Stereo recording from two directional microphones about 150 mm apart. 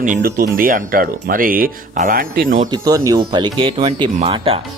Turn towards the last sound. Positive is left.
turn(degrees=-35)  # may be behind; listen again after turning